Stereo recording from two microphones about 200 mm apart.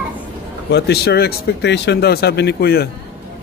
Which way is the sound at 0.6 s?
55° left (ahead or behind).